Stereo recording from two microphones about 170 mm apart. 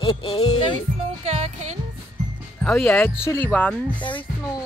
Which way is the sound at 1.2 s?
40° right (ahead or behind).